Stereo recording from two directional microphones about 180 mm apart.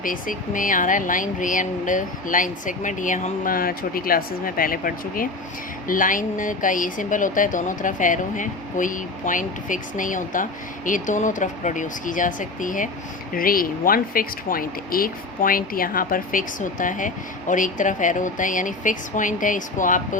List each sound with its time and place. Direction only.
0.0 s speech: 50° left (ahead or behind)